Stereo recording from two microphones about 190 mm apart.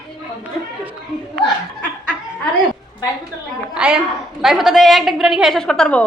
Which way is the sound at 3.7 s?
5° right (ahead or behind).